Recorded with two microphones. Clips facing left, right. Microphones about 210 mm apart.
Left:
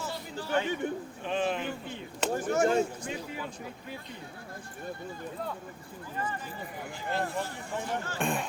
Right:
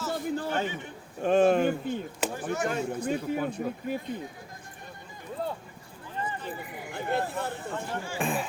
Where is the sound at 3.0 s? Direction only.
55° right (ahead or behind).